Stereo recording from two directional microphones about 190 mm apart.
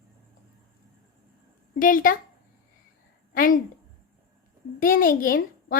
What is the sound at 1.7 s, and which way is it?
Speech, 45° left (ahead or behind).